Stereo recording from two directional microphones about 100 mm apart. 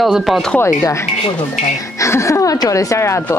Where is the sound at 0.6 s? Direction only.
25° left (ahead or behind).